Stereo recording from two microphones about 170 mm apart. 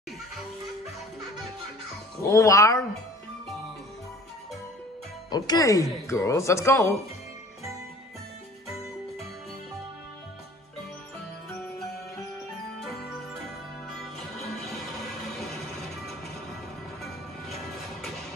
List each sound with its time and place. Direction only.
2.2 s speech: 20° left (ahead or behind)
5.3 s speech: 20° left (ahead or behind)
14.2 s music: centre (ahead or behind)